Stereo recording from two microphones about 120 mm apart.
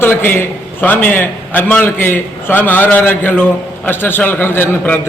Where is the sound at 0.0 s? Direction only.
20° left (ahead or behind).